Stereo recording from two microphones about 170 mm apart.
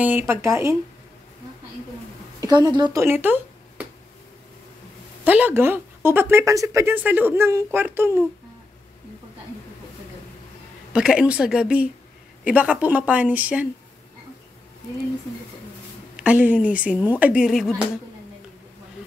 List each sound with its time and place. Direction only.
0.0 s speech: 10° right (ahead or behind)
2.4 s speech: 25° right (ahead or behind)
5.2 s speech: 10° right (ahead or behind)
10.9 s speech: 5° right (ahead or behind)
16.2 s speech: 10° right (ahead or behind)